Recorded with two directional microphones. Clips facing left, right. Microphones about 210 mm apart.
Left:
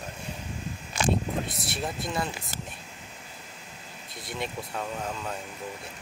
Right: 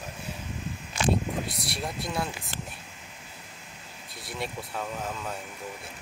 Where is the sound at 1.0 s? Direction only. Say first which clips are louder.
Even; 40° left (ahead or behind).